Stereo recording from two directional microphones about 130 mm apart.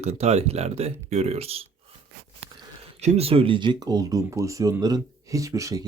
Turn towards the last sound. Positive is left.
turn(degrees=-25)  # may be behind; listen again after turning